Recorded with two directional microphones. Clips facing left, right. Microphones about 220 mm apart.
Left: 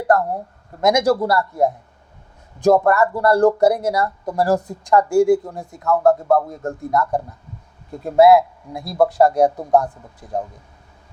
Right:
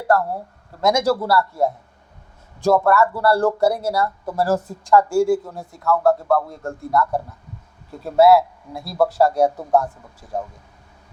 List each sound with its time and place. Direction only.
0.8 s a man's voice: 20° left (ahead or behind)